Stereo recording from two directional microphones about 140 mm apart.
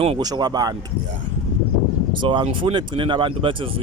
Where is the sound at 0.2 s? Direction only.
30° right (ahead or behind).